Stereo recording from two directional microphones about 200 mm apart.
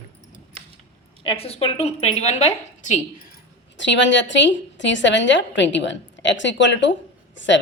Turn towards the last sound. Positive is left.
turn(degrees=65)  # may be behind; listen again after turning